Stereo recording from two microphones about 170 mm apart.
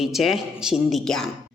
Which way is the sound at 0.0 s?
Centre (ahead or behind).